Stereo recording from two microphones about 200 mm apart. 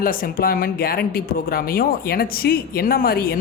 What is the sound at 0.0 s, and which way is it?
Speech, 45° left (ahead or behind).